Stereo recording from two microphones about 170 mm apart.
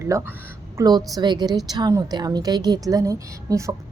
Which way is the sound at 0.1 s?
15° right (ahead or behind).